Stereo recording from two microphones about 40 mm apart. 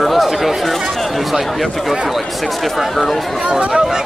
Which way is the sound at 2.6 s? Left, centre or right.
Centre.